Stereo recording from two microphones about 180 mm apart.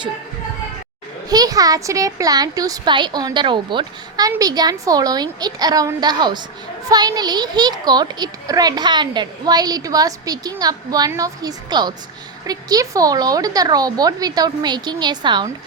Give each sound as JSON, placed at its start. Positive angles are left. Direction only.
{"t": 1.3, "sound": "a child's voice", "side_deg": -20}